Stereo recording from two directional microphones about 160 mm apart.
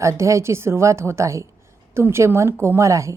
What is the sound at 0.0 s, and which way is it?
A woman's voice, 20° right (ahead or behind).